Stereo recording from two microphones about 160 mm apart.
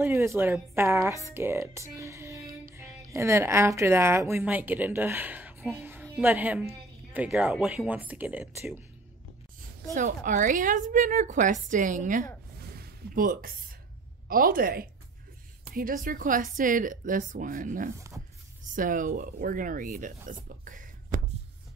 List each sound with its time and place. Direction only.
0.0 s speech: 15° right (ahead or behind)
5.7 s music: 15° right (ahead or behind)
6.2 s speech: 10° right (ahead or behind)
9.9 s speech: 50° right (ahead or behind)
12.7 s a sound: 70° right (ahead or behind)
14.2 s speech: 65° right (ahead or behind)